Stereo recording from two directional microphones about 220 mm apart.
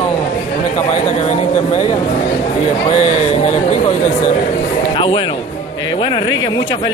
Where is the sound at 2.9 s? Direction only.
30° left (ahead or behind).